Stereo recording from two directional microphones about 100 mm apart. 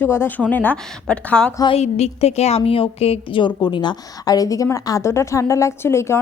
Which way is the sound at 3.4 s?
50° left (ahead or behind).